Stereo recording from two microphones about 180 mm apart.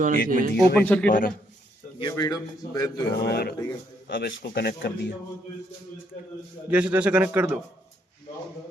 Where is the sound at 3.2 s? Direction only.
65° left (ahead or behind).